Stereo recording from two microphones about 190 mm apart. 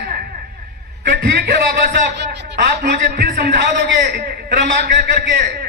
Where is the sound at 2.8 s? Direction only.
60° right (ahead or behind).